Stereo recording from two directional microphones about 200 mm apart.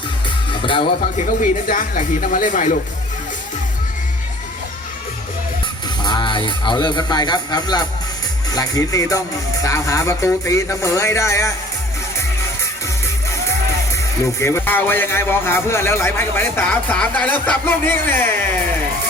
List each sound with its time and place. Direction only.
0.6 s speech: 25° left (ahead or behind)
1.4 s speech: 40° left (ahead or behind)
6.0 s speech: 20° left (ahead or behind)
13.9 s speech: 15° left (ahead or behind)